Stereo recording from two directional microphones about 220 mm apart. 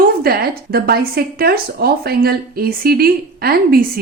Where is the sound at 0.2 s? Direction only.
45° right (ahead or behind).